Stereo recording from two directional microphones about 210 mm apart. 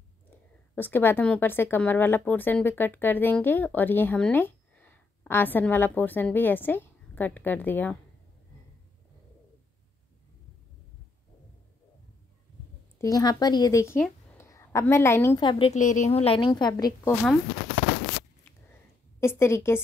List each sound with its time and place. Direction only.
0.7 s a woman's voice: 10° left (ahead or behind)
13.0 s a woman's voice: 20° left (ahead or behind)
15.7 s a woman's voice: 35° left (ahead or behind); by 17.3 s 15° left (ahead or behind)
19.1 s a woman's voice: 10° left (ahead or behind)